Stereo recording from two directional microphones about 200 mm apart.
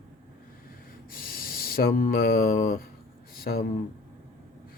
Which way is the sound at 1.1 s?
45° left (ahead or behind).